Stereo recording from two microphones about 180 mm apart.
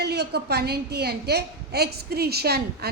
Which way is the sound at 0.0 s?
65° right (ahead or behind).